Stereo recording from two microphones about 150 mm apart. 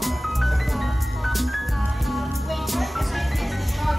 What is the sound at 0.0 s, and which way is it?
Music, centre (ahead or behind).